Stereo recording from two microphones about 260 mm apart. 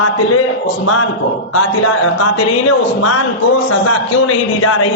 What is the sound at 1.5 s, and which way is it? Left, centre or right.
A man's voice, left.